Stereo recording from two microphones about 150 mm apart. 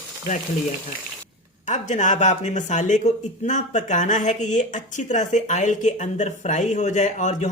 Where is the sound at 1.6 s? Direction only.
55° left (ahead or behind).